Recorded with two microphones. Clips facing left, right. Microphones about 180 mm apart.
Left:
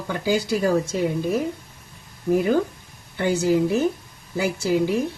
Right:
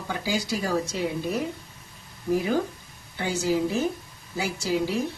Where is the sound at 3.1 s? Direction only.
60° left (ahead or behind).